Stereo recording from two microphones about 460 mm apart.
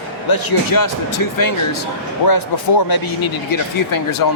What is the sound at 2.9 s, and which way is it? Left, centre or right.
Speech, left.